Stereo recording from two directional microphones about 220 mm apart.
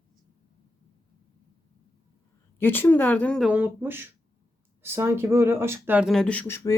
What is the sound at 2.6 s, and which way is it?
Speech, 10° left (ahead or behind).